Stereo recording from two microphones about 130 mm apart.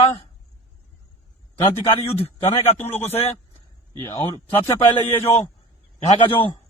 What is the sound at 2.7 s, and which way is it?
A man's voice, 15° left (ahead or behind).